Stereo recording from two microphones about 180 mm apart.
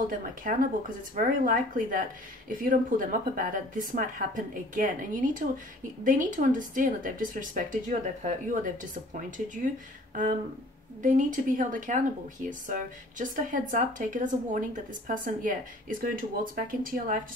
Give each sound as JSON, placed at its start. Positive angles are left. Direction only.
{"t": 0.1, "sound": "speech", "side_deg": -50}
{"t": 11.0, "sound": "speech", "side_deg": -45}